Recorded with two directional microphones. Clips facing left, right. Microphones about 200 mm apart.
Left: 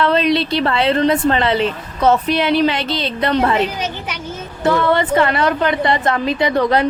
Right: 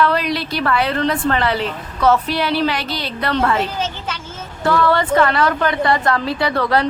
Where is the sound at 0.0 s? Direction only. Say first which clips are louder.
Left 3 dB; 25° left (ahead or behind).